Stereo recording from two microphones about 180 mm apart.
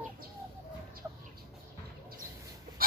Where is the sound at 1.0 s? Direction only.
15° right (ahead or behind).